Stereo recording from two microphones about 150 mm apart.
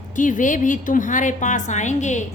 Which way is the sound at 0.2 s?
60° left (ahead or behind).